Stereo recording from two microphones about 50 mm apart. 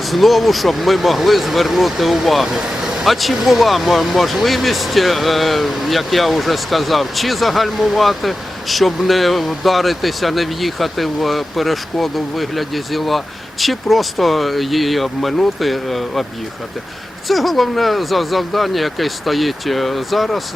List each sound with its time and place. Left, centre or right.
0.0 s speech: centre
17.2 s speech: centre